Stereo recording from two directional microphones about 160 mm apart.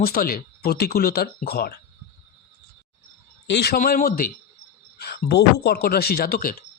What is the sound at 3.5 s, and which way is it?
Speech, 90° left.